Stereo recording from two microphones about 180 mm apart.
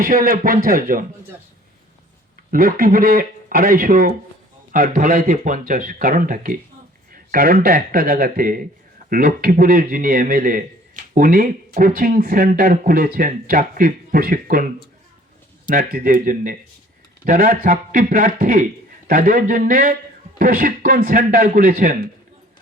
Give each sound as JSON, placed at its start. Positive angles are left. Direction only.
{"t": 0.0, "sound": "a man's voice", "side_deg": -50}
{"t": 2.5, "sound": "a man's voice", "side_deg": -50}
{"t": 15.7, "sound": "a man's voice", "side_deg": -55}